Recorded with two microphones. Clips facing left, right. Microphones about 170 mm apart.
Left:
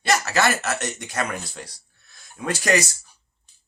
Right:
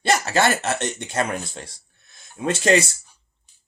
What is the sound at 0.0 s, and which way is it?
Speech, 30° right (ahead or behind).